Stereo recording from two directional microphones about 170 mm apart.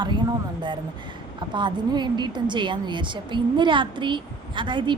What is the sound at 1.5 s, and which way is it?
A woman's voice, 25° right (ahead or behind).